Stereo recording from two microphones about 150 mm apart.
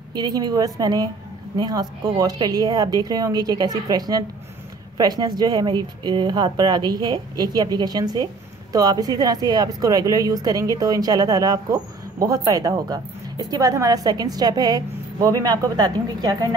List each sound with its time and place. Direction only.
0.1 s speech: 30° right (ahead or behind)